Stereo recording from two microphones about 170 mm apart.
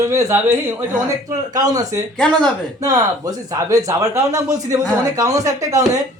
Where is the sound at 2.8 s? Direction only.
20° right (ahead or behind).